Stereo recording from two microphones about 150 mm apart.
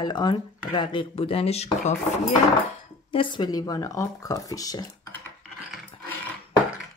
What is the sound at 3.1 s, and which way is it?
Speech, 30° left (ahead or behind).